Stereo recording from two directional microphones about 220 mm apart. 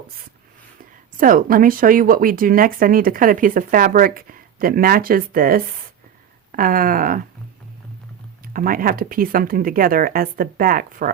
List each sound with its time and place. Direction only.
0.8 s speech: 40° right (ahead or behind)
8.5 s speech: 40° right (ahead or behind)